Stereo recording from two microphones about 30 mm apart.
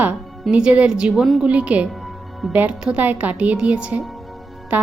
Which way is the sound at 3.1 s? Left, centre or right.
Right.